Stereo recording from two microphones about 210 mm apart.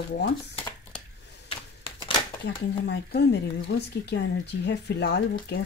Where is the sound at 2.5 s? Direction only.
50° left (ahead or behind).